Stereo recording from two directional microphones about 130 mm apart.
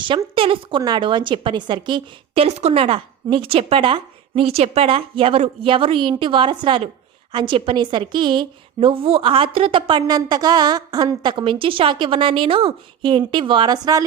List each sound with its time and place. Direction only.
0.0 s a woman's voice: 40° right (ahead or behind)